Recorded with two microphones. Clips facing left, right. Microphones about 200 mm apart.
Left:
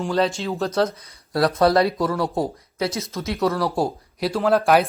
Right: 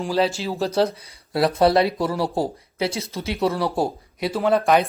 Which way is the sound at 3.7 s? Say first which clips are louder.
Even; centre (ahead or behind).